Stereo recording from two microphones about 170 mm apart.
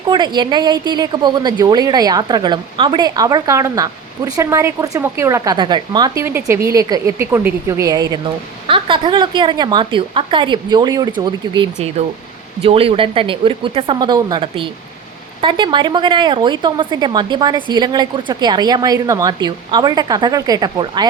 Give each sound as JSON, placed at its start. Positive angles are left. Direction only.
{"t": 0.1, "sound": "speech", "side_deg": -25}
{"t": 6.2, "sound": "speech", "side_deg": -15}